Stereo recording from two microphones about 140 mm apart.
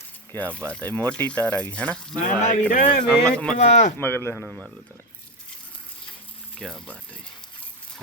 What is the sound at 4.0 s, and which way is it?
Speech, 15° left (ahead or behind).